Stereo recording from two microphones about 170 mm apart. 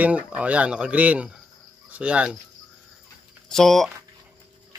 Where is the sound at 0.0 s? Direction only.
10° right (ahead or behind).